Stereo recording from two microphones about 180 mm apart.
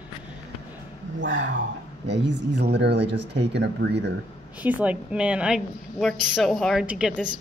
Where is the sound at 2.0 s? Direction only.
75° right (ahead or behind).